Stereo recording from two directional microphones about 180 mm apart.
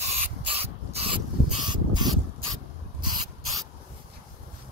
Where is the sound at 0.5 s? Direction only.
30° right (ahead or behind).